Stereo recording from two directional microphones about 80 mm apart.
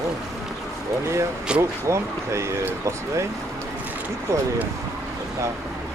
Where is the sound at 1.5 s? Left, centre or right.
Centre.